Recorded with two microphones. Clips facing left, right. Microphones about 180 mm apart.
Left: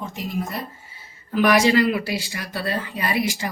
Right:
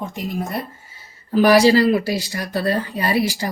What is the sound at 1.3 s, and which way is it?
Speech, 35° right (ahead or behind).